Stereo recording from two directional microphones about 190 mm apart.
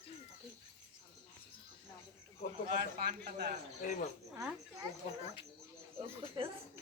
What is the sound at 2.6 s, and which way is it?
Speech, 50° right (ahead or behind).